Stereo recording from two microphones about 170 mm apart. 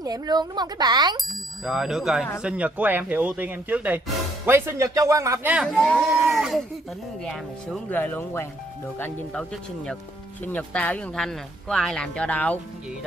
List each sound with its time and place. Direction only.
0.0 s speech: 20° right (ahead or behind)
1.6 s a man's voice: 5° right (ahead or behind)
5.7 s speech: 5° left (ahead or behind)